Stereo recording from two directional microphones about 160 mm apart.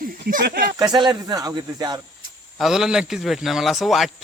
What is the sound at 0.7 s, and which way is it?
Speech, 25° right (ahead or behind).